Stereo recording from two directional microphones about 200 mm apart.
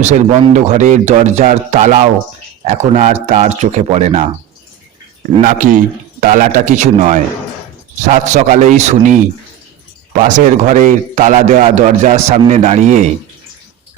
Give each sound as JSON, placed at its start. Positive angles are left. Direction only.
{"t": 0.0, "sound": "a man's voice", "side_deg": -35}
{"t": 5.4, "sound": "a man's voice", "side_deg": -40}